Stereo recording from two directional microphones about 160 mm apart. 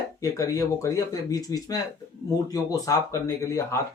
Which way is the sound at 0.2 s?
20° left (ahead or behind).